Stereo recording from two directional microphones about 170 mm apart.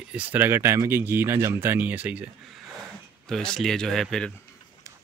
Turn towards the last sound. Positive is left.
turn(degrees=0)  # may be behind; listen again after turning